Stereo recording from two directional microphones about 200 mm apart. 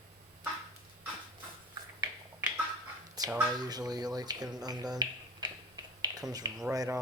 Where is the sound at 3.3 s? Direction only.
5° right (ahead or behind).